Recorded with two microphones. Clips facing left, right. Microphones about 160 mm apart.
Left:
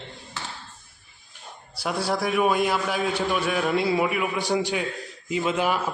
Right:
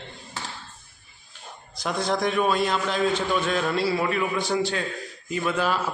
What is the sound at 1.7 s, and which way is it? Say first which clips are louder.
A man's voice: even; 10° left (ahead or behind).